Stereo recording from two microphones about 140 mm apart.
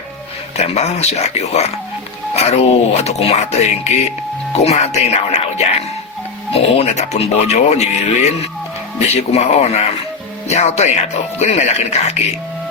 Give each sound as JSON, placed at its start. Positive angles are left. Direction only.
{"t": 0.5, "sound": "speech", "side_deg": 50}
{"t": 4.5, "sound": "speech", "side_deg": 50}